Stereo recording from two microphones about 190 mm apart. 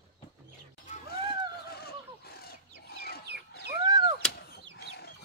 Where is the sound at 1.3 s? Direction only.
55° left (ahead or behind).